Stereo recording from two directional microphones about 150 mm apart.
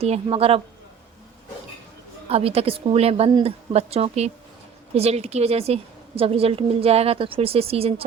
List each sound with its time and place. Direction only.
0.0 s a woman's voice: 40° right (ahead or behind)
2.3 s a woman's voice: 40° right (ahead or behind)